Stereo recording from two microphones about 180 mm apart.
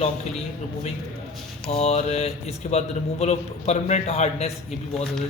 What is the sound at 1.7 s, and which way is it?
Speech, 35° left (ahead or behind).